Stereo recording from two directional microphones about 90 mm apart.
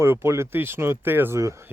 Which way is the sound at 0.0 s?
25° right (ahead or behind).